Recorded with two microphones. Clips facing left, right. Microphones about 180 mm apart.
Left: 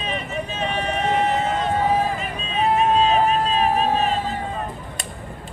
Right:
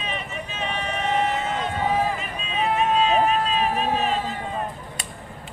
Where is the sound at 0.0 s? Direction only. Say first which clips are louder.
Left 4 dB; 35° left (ahead or behind).